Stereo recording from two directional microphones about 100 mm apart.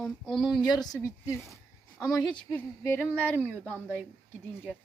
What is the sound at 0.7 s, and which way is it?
Speech, 40° left (ahead or behind).